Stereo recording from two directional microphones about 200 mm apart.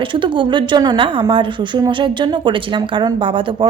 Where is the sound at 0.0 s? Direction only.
25° right (ahead or behind).